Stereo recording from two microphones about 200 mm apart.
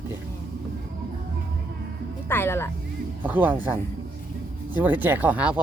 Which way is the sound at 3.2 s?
10° right (ahead or behind).